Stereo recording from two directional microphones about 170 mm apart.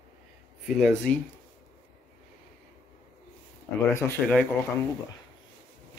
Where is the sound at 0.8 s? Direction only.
5° left (ahead or behind).